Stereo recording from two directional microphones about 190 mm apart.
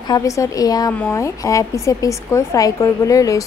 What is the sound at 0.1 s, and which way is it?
A woman's voice, 20° left (ahead or behind).